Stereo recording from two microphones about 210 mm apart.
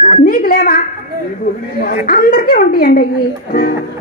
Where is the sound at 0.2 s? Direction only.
40° left (ahead or behind).